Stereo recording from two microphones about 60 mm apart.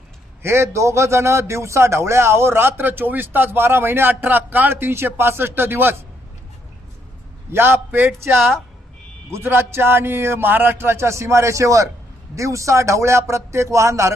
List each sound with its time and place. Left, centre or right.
0.4 s a man's voice: right
7.5 s a man's voice: right